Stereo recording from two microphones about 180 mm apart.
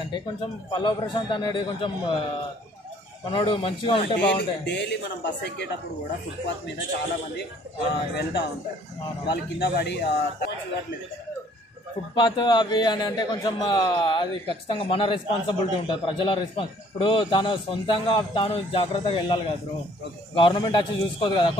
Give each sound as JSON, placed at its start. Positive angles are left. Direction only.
{"t": 0.0, "sound": "a man's voice", "side_deg": 25}
{"t": 3.3, "sound": "a man's voice", "side_deg": 30}
{"t": 4.0, "sound": "speech", "side_deg": 70}
{"t": 8.1, "sound": "speech", "side_deg": 65}
{"t": 12.2, "sound": "a man's voice", "side_deg": 25}